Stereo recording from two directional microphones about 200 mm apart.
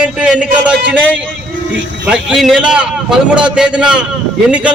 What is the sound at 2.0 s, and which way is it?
A man's voice, 5° right (ahead or behind).